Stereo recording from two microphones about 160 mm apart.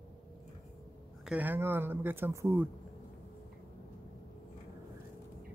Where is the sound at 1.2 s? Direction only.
10° right (ahead or behind).